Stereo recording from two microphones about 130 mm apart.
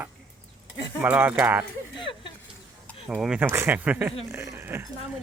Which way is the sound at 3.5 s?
20° right (ahead or behind).